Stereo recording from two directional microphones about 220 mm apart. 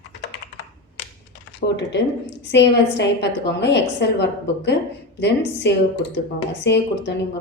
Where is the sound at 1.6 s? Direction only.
45° left (ahead or behind).